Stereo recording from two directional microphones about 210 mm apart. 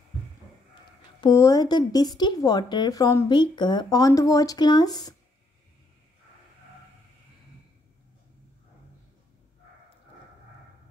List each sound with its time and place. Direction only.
1.2 s speech: 15° left (ahead or behind)